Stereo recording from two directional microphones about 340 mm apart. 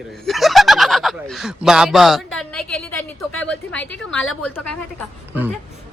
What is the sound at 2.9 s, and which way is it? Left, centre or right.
Speech, left.